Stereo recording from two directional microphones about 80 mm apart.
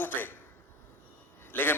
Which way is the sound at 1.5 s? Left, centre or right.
Left.